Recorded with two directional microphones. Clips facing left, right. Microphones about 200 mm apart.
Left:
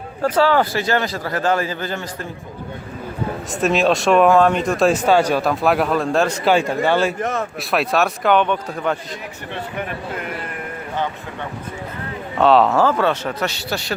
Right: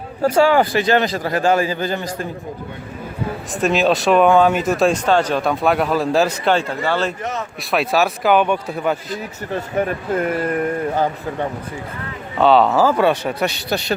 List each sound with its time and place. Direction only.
0.3 s a man's voice: 15° right (ahead or behind)
3.5 s speech: centre (ahead or behind)
6.5 s speech: 15° left (ahead or behind)
7.2 s speech: 50° left (ahead or behind)
7.7 s speech: centre (ahead or behind)
9.5 s speech: 40° right (ahead or behind)
12.4 s a man's voice: centre (ahead or behind); by 13.9 s 20° right (ahead or behind)